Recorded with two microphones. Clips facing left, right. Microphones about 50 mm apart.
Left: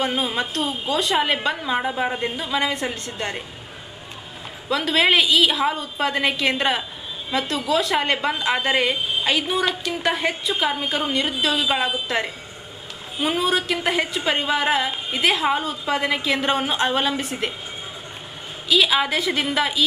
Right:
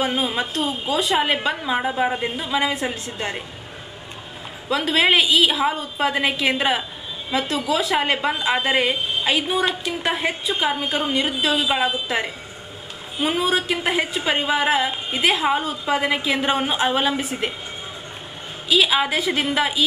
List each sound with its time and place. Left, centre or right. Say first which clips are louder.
0.0 s a woman's voice: right 1 dB; centre
4.6 s a woman's voice: even; centre
18.7 s a woman's voice: even; centre